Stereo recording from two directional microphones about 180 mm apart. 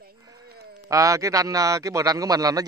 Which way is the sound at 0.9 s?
20° right (ahead or behind).